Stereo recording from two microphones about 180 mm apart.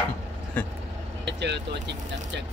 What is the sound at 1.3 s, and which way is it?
Speech, 70° right (ahead or behind).